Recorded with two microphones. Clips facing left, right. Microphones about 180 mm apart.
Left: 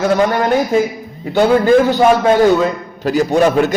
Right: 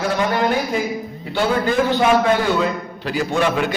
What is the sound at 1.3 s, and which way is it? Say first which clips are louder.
Speech: left 9 dB; 45° left (ahead or behind).